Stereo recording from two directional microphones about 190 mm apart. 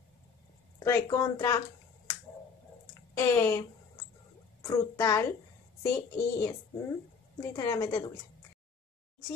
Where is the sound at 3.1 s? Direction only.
15° left (ahead or behind).